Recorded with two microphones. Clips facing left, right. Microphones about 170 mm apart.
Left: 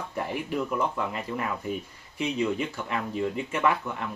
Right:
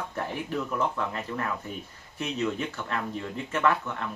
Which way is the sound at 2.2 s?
15° left (ahead or behind).